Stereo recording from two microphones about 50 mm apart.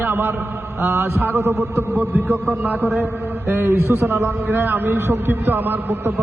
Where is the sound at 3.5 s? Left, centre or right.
Right.